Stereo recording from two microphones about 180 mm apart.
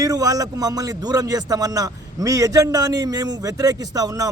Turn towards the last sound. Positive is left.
turn(degrees=-20)  # may be behind; listen again after turning